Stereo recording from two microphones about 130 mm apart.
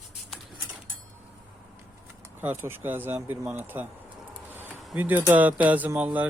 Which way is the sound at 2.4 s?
15° right (ahead or behind).